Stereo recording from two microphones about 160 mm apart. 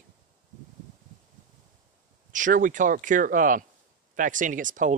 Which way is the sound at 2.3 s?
55° right (ahead or behind).